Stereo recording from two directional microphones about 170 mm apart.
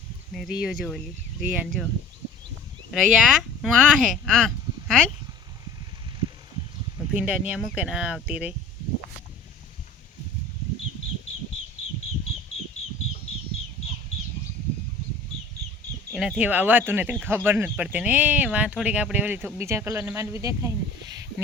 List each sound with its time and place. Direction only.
0.3 s speech: 5° right (ahead or behind)
2.9 s speech: 5° right (ahead or behind)
7.1 s speech: 5° right (ahead or behind)
16.1 s speech: centre (ahead or behind); by 21.4 s 15° right (ahead or behind)